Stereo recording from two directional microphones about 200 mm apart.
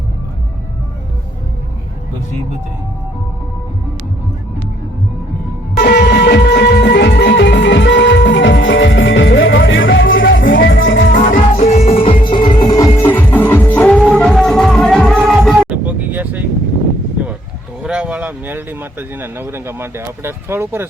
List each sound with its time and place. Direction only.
5.7 s music: 60° left (ahead or behind)
11.1 s music: 40° left (ahead or behind); by 15.4 s centre (ahead or behind)
15.4 s vehicle: 5° right (ahead or behind)
17.8 s speech: 5° right (ahead or behind)